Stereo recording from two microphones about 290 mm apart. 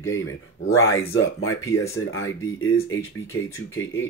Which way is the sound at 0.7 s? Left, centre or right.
Left.